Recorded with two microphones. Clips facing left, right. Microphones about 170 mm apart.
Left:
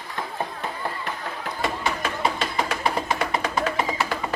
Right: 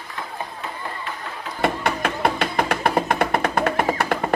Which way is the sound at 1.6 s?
60° right (ahead or behind).